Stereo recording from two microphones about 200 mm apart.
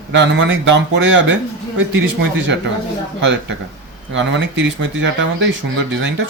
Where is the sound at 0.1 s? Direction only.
65° right (ahead or behind).